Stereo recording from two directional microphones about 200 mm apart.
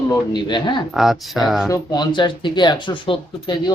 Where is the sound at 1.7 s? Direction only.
20° left (ahead or behind).